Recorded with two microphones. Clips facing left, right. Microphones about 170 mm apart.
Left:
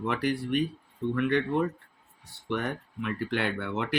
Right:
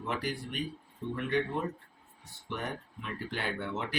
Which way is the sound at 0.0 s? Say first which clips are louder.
Left 6 dB; 75° left (ahead or behind).